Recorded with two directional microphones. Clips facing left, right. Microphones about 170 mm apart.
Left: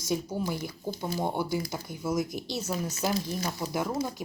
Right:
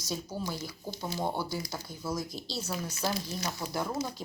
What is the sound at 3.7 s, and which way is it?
Speech, 15° left (ahead or behind).